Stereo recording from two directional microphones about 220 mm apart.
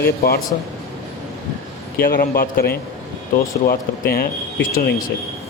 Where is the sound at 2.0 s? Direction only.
40° left (ahead or behind).